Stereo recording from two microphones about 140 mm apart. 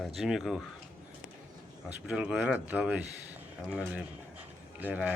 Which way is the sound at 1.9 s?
10° right (ahead or behind).